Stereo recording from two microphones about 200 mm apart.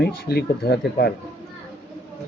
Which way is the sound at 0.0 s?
55° left (ahead or behind).